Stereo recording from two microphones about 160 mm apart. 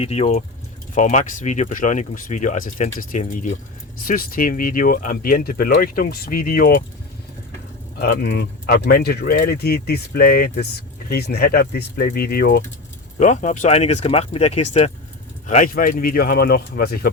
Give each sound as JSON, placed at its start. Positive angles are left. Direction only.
{"t": 0.0, "sound": "speech", "side_deg": 40}
{"t": 5.1, "sound": "speech", "side_deg": 65}
{"t": 8.0, "sound": "speech", "side_deg": 75}
{"t": 13.1, "sound": "speech", "side_deg": 50}